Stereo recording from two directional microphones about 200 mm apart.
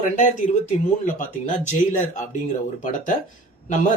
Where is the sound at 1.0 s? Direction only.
40° left (ahead or behind).